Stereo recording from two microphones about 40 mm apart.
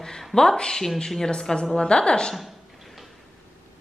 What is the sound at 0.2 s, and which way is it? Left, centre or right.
A woman's voice, centre.